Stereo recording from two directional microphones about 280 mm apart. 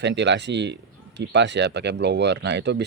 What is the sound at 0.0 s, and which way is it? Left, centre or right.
Speech, right.